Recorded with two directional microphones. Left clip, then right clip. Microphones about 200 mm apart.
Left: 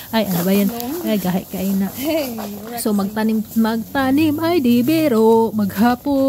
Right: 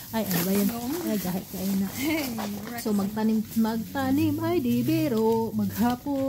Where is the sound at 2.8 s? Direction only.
30° left (ahead or behind).